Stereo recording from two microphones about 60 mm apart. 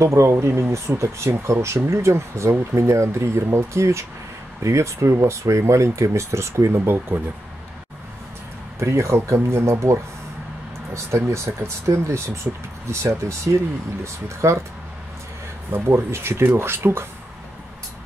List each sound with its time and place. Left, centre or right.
0.0 s speech: right
8.7 s speech: right
15.7 s speech: right